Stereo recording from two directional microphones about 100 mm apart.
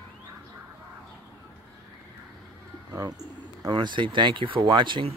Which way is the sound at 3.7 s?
50° right (ahead or behind).